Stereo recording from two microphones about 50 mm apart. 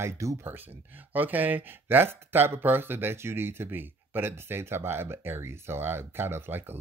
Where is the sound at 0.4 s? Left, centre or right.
Right.